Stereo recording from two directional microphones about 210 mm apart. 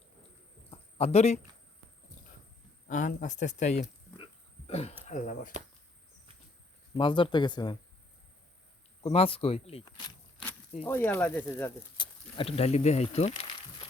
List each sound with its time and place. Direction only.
0.7 s a sound: 30° left (ahead or behind)
2.8 s speech: 40° left (ahead or behind)
4.2 s a sound: 30° left (ahead or behind)
5.0 s speech: 35° left (ahead or behind)
6.9 s speech: 25° left (ahead or behind)
9.0 s speech: 25° left (ahead or behind)
10.8 s speech: 10° left (ahead or behind)
11.9 s speech: 25° left (ahead or behind)